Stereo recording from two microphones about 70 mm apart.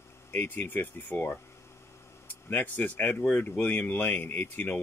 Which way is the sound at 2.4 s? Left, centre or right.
Left.